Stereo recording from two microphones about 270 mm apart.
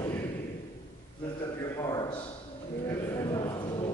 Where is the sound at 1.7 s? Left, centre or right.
Centre.